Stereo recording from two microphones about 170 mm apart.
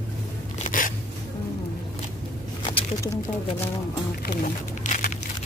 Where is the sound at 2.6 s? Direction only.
30° left (ahead or behind).